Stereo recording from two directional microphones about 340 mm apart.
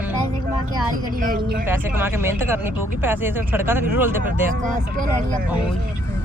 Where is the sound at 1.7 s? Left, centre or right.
Centre.